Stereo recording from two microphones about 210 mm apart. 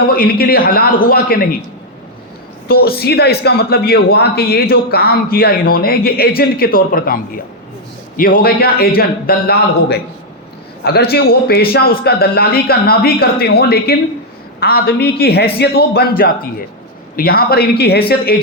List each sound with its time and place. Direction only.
0.1 s speech: 45° left (ahead or behind)
2.6 s speech: 45° left (ahead or behind)